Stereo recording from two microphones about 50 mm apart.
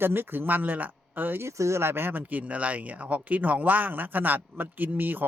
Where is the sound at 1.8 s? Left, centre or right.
Right.